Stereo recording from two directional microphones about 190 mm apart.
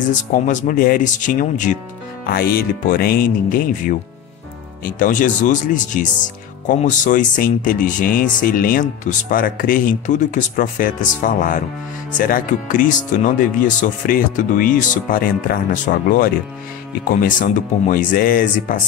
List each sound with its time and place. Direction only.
0.5 s speech: 45° left (ahead or behind)